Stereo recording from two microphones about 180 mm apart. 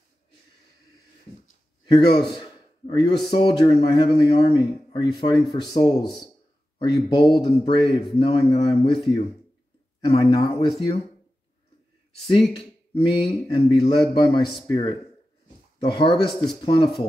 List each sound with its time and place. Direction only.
2.3 s a sound: 25° left (ahead or behind)
3.3 s speech: 30° left (ahead or behind)
12.3 s speech: 30° left (ahead or behind)